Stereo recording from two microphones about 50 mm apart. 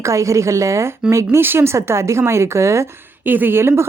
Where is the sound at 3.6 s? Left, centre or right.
Right.